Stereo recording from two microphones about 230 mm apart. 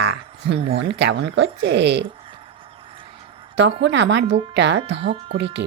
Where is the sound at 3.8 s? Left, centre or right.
Right.